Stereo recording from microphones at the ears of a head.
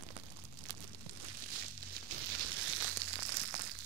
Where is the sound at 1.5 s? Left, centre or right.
Right.